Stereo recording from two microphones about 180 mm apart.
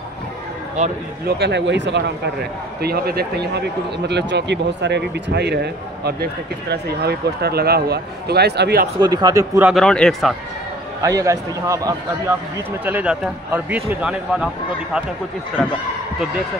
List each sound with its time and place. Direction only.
0.8 s speech: 40° right (ahead or behind)
1.2 s speech: 70° right (ahead or behind)
2.8 s a man's voice: 60° right (ahead or behind)
9.0 s a man's voice: 20° right (ahead or behind)
9.7 s speech: 5° left (ahead or behind)
11.0 s speech: 20° right (ahead or behind); by 14.5 s 5° right (ahead or behind)